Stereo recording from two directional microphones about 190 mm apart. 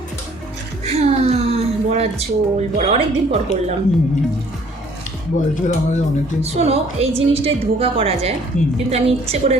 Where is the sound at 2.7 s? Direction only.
35° right (ahead or behind).